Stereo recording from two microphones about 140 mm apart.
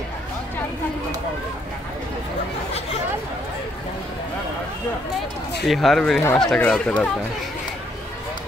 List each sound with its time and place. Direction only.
5.7 s speech: centre (ahead or behind)